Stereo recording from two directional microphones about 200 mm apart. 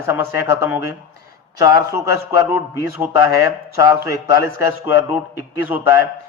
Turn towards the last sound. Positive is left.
turn(degrees=-10)  # may be behind; listen again after turning